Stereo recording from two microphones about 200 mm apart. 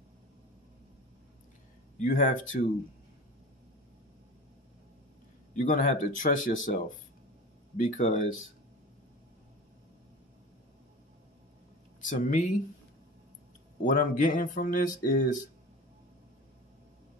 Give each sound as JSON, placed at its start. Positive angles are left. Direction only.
{"t": 2.0, "sound": "speech", "side_deg": 40}
{"t": 5.6, "sound": "speech", "side_deg": 40}
{"t": 12.0, "sound": "speech", "side_deg": 40}
{"t": 13.8, "sound": "speech", "side_deg": 40}